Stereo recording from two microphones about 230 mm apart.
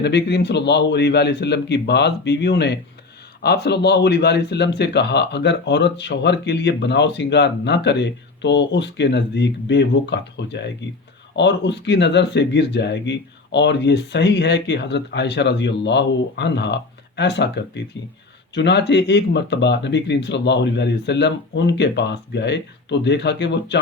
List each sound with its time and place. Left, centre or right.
0.0 s speech: left